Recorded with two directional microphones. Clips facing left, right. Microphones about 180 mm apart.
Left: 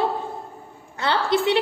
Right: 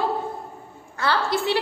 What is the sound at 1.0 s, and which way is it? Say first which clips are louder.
Speech: left 2 dB; 20° left (ahead or behind).